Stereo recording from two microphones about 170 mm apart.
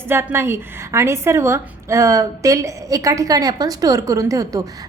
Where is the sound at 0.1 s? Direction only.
15° right (ahead or behind).